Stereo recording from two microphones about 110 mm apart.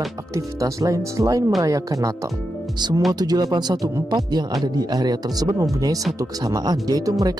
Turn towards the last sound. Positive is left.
turn(degrees=-35)  # may be behind; listen again after turning